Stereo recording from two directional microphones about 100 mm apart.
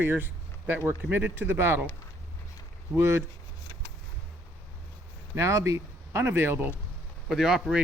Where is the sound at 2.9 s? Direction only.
25° right (ahead or behind).